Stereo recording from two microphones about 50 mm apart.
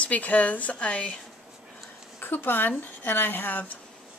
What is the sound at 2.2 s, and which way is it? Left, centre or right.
A woman's voice, left.